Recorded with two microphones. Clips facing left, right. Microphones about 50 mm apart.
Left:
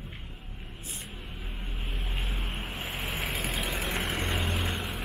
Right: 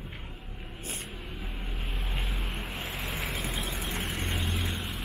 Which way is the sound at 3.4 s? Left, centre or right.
Left.